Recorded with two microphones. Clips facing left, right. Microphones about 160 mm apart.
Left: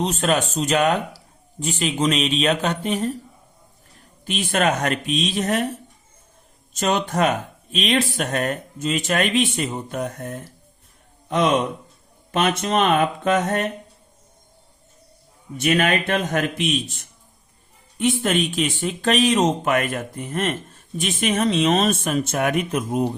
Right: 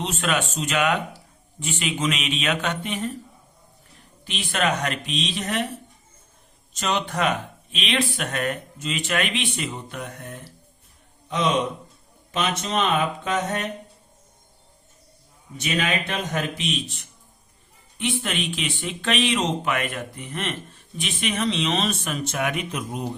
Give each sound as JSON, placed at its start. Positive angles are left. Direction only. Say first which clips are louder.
{"t": 0.0, "sound": "speech", "louder": "left 4 dB", "side_deg": 40}
{"t": 4.3, "sound": "speech", "louder": "left 4 dB", "side_deg": 45}
{"t": 6.7, "sound": "speech", "louder": "left 4 dB", "side_deg": 45}
{"t": 15.5, "sound": "speech", "louder": "left 6 dB", "side_deg": 55}